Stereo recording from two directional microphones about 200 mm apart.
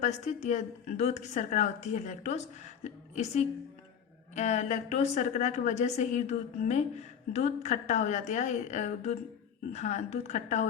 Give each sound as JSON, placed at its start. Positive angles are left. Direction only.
{"t": 0.0, "sound": "a woman's voice", "side_deg": 35}